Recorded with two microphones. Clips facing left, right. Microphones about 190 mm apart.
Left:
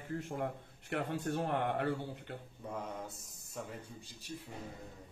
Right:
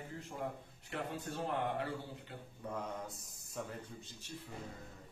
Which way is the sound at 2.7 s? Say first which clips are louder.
Even; centre (ahead or behind).